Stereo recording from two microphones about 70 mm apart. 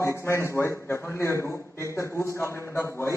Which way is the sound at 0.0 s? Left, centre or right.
Left.